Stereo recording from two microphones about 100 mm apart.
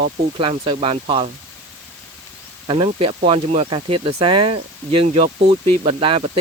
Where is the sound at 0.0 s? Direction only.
60° right (ahead or behind).